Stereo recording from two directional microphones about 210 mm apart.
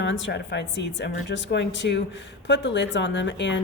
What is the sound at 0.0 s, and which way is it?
Speech, 55° left (ahead or behind).